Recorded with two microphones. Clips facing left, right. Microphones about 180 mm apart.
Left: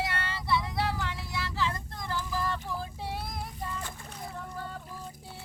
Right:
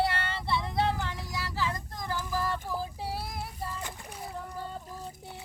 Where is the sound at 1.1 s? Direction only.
40° right (ahead or behind).